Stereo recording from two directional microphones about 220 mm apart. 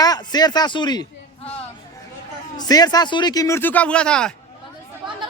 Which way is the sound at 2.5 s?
15° left (ahead or behind).